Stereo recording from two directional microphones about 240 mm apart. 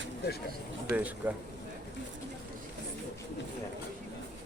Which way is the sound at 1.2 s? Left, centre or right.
Centre.